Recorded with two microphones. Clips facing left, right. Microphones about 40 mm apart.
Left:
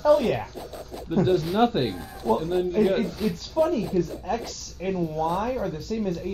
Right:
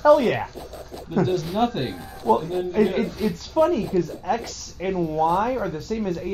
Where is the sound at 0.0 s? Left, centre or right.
Right.